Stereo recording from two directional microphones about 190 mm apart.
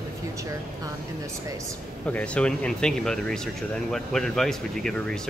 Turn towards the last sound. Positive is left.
turn(degrees=5)  # may be behind; listen again after turning